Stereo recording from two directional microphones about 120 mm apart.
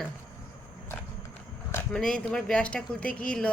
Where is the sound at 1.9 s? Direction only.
5° left (ahead or behind).